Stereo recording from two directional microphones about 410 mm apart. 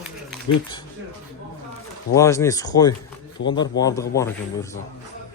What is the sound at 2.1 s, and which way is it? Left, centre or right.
Speech, centre.